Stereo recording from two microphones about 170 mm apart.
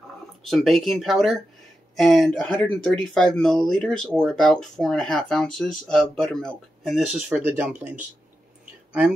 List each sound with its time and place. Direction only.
0.5 s speech: centre (ahead or behind)